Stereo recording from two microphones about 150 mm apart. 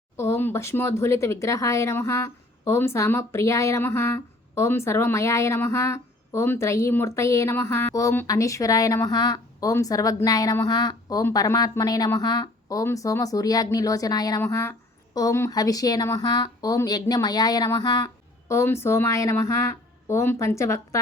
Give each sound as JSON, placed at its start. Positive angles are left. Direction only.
{"t": 0.2, "sound": "a woman's voice", "side_deg": 15}